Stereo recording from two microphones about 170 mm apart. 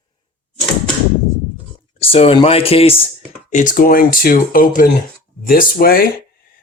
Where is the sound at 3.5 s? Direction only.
50° left (ahead or behind).